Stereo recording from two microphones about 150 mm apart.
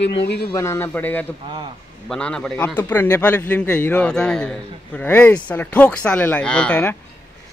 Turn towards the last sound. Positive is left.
turn(degrees=10)  # may be behind; listen again after turning